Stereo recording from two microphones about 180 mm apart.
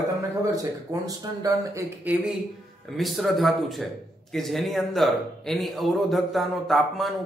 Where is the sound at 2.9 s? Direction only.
Centre (ahead or behind).